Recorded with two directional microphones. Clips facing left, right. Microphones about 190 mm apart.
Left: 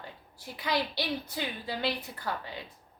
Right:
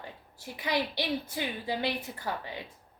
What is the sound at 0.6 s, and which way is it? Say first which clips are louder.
A woman's voice: even; 15° right (ahead or behind).